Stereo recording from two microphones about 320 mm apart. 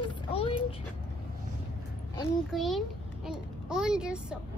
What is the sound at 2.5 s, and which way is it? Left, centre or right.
Child singing, centre.